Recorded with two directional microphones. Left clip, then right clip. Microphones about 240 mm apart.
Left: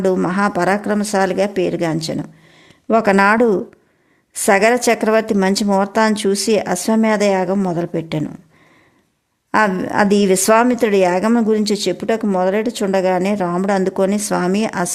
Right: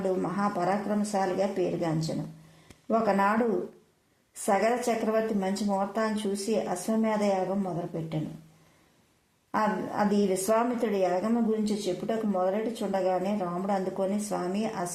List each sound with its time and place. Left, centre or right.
0.0 s speech: left
4.4 s speech: left
9.5 s speech: left